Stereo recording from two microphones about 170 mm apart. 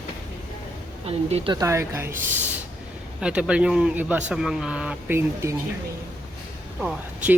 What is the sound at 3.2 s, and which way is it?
Speech, 5° right (ahead or behind).